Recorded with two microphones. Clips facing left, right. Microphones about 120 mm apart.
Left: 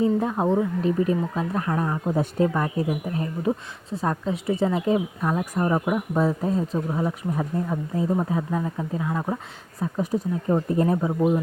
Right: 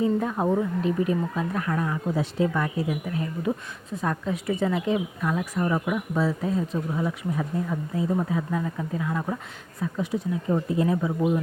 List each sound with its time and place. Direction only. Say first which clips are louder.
0.0 s speech: left 2 dB; 25° left (ahead or behind)
0.8 s speech: left 2 dB; 35° left (ahead or behind)
9.8 s speech: left 2 dB; 40° left (ahead or behind)